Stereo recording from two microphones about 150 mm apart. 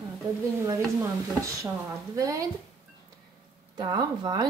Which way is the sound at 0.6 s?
20° right (ahead or behind).